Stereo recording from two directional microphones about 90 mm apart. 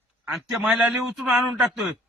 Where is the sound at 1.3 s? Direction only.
Centre (ahead or behind).